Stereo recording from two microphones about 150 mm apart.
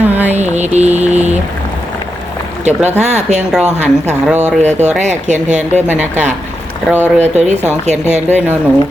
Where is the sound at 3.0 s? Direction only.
50° right (ahead or behind).